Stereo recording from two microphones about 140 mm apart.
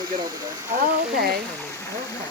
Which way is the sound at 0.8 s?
90° right.